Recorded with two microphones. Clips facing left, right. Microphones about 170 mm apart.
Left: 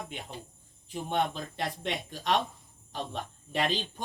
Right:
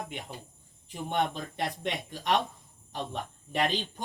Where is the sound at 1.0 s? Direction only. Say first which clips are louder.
Right 1 dB; 15° right (ahead or behind).